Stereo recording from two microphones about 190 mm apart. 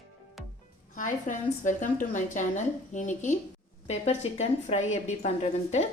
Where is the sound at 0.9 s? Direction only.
40° left (ahead or behind).